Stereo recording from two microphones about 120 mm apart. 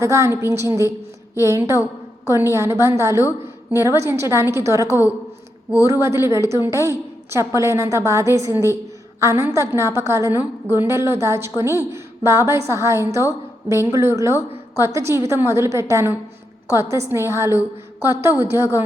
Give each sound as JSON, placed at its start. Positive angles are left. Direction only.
{"t": 0.0, "sound": "a woman's voice", "side_deg": -25}